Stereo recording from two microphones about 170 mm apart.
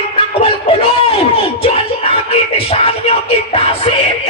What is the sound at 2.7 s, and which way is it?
Music, 35° left (ahead or behind).